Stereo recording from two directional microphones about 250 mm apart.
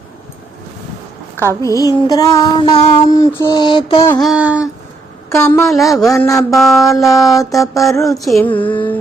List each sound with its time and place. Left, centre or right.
1.4 s child singing: centre
3.4 s mantra: centre
4.1 s speech: centre
5.3 s speech: centre
6.1 s child singing: centre
6.5 s speech: centre
7.0 s child singing: centre
8.0 s speech: centre
8.4 s child singing: centre